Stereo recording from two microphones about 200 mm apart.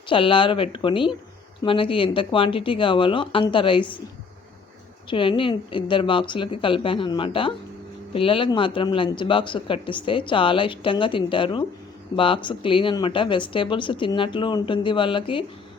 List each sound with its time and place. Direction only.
0.1 s speech: 25° left (ahead or behind)
5.0 s speech: 25° left (ahead or behind)